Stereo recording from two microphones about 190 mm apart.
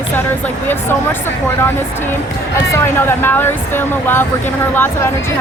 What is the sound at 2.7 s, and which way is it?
Speech, 10° left (ahead or behind).